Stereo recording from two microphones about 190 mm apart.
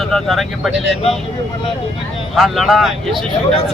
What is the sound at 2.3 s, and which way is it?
Speech, centre (ahead or behind).